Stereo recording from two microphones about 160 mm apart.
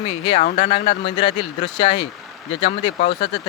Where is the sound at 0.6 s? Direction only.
40° left (ahead or behind).